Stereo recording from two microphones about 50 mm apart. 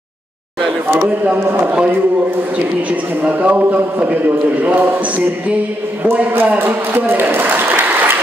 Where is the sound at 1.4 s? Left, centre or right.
Right.